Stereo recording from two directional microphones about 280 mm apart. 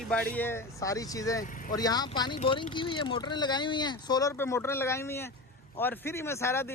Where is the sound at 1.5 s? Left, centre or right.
Left.